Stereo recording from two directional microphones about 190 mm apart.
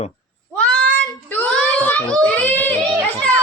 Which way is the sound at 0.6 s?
10° left (ahead or behind).